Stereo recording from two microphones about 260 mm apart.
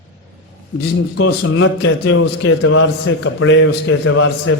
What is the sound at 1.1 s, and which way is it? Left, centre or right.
A man's voice, left.